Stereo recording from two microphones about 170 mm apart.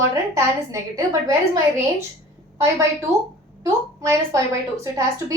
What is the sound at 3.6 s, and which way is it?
A woman's voice, 20° right (ahead or behind).